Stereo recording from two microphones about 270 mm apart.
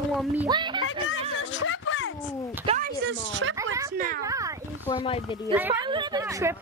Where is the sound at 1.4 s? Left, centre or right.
Left.